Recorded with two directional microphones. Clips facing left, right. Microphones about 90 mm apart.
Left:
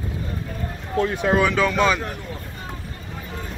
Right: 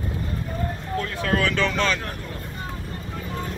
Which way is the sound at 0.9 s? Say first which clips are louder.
Left 6 dB; 20° left (ahead or behind).